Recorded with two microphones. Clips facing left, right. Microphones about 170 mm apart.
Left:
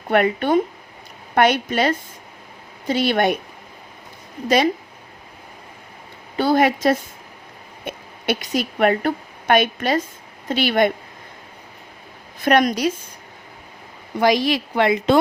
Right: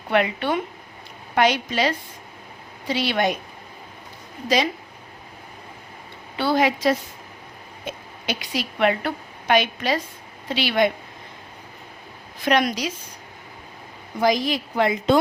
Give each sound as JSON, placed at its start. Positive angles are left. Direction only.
{"t": 0.1, "sound": "a woman's voice", "side_deg": 50}
{"t": 4.4, "sound": "a woman's voice", "side_deg": 55}
{"t": 6.3, "sound": "a woman's voice", "side_deg": 45}
{"t": 12.5, "sound": "a woman's voice", "side_deg": 50}
{"t": 14.2, "sound": "speech", "side_deg": 75}